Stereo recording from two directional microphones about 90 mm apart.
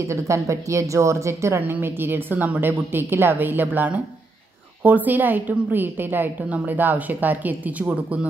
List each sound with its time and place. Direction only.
0.1 s a woman's voice: 35° right (ahead or behind); by 8.3 s 15° right (ahead or behind)